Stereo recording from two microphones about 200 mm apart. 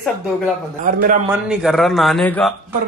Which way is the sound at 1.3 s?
5° right (ahead or behind).